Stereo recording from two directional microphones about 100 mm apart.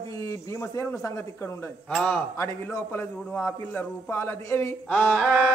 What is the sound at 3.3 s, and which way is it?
Speech, 15° left (ahead or behind).